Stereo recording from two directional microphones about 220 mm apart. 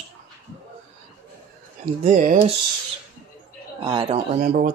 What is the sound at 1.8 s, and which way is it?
Speech, 35° right (ahead or behind).